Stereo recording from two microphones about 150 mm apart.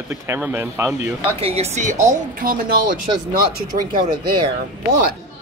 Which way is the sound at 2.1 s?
70° right (ahead or behind).